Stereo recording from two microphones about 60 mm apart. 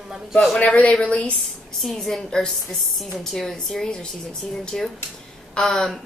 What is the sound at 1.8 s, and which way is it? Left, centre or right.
A woman's voice, centre.